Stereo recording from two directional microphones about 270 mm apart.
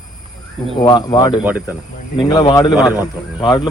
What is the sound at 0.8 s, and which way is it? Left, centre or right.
Speech, centre.